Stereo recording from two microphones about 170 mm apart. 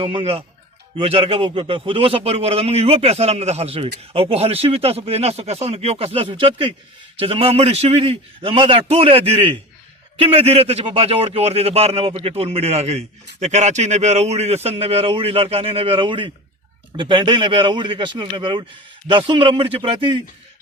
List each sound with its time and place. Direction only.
0.0 s a man's voice: 35° right (ahead or behind)